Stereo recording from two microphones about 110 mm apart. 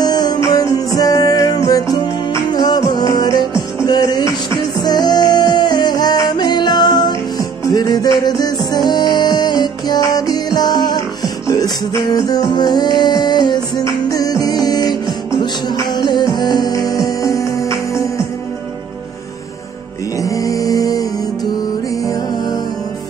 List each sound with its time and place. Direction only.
0.0 s music: 40° left (ahead or behind)
12.5 s music: 40° left (ahead or behind)
20.2 s music: 30° left (ahead or behind)